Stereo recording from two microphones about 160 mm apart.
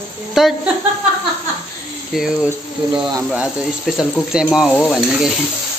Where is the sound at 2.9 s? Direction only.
30° right (ahead or behind).